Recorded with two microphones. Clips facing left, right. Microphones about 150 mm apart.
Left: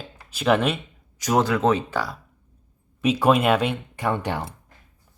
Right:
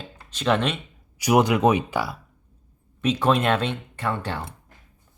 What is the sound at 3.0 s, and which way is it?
Speech, 10° left (ahead or behind).